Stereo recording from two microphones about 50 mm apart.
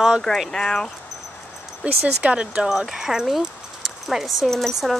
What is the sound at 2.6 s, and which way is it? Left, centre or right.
Speech, centre.